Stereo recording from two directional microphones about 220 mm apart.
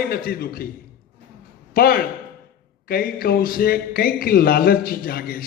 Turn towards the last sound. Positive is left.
turn(degrees=45)  # may be behind; listen again after turning